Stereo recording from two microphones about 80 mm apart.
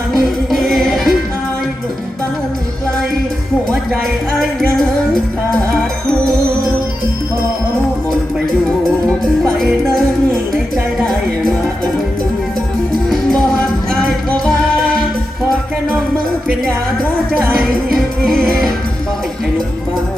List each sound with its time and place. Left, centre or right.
0.1 s music: centre
9.0 s music: centre
13.1 s music: centre
17.6 s music: centre